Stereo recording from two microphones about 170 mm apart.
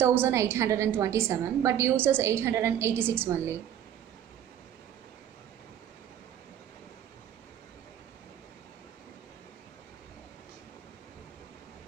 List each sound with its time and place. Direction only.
0.0 s a woman's voice: 15° right (ahead or behind)